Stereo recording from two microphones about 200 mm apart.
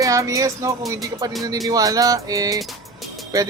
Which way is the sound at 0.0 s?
15° right (ahead or behind).